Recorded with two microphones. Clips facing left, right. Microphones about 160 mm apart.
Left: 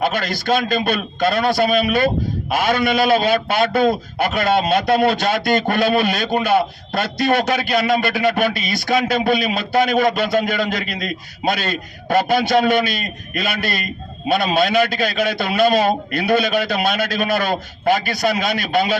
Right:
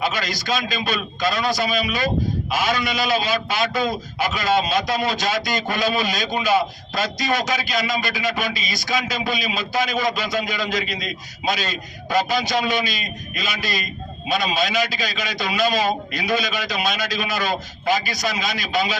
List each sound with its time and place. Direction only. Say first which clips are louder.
0.0 s a man's voice: left 4 dB; 55° left (ahead or behind)